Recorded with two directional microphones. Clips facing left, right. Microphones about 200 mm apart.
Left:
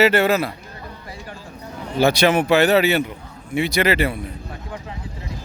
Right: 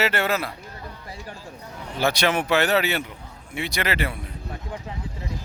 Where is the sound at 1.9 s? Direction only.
10° left (ahead or behind).